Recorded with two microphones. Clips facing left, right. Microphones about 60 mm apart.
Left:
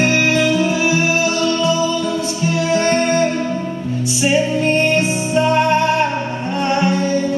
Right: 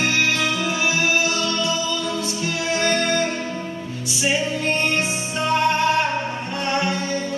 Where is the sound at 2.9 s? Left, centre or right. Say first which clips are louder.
Left 3 dB; left.